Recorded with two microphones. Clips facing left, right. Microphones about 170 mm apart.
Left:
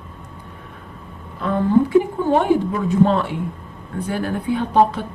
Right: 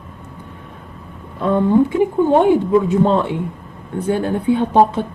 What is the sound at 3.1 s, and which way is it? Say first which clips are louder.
Speech: right 3 dB; 20° right (ahead or behind).